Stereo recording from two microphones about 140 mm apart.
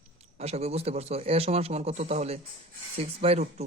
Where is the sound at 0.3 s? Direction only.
50° right (ahead or behind).